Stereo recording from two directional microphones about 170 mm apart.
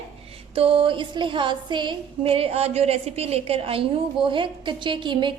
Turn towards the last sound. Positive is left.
turn(degrees=-30)  # may be behind; listen again after turning